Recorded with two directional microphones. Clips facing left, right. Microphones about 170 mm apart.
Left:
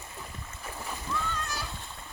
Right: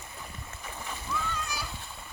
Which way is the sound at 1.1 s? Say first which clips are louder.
Even; 5° right (ahead or behind).